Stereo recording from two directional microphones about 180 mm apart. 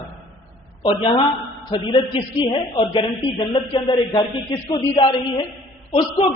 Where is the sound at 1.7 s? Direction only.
30° left (ahead or behind).